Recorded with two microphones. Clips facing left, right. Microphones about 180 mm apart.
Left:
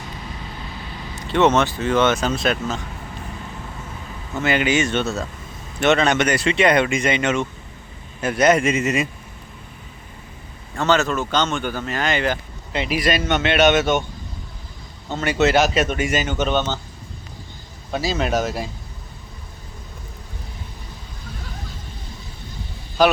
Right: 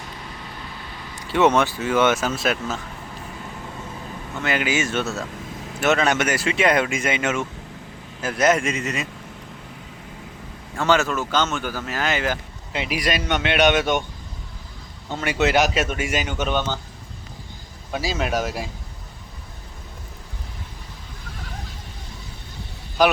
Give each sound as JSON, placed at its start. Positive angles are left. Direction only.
{"t": 1.3, "sound": "speech", "side_deg": -10}
{"t": 4.4, "sound": "speech", "side_deg": 0}
{"t": 10.8, "sound": "speech", "side_deg": -10}
{"t": 15.2, "sound": "speech", "side_deg": -10}
{"t": 17.9, "sound": "speech", "side_deg": -10}
{"t": 23.0, "sound": "a man's voice", "side_deg": -15}